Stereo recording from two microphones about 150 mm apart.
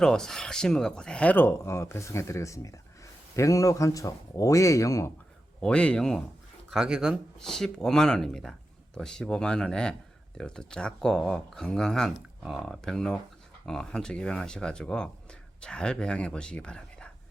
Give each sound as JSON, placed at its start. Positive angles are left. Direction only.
{"t": 0.0, "sound": "speech", "side_deg": 5}
{"t": 5.5, "sound": "speech", "side_deg": 5}